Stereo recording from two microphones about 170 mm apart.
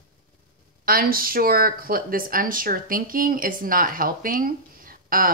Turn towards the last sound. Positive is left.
turn(degrees=-55)  # may be behind; listen again after turning